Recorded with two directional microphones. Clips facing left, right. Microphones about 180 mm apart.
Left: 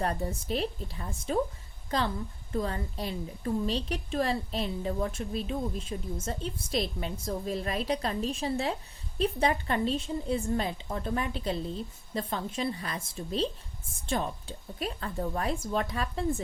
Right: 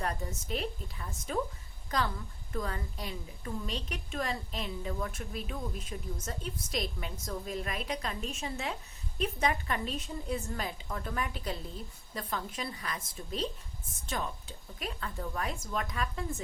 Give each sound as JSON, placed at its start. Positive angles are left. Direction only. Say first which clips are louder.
{"t": 0.0, "sound": "a woman's voice", "louder": "left 5 dB", "side_deg": 35}